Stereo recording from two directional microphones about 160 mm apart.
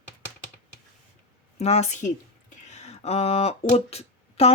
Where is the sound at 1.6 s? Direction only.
45° left (ahead or behind).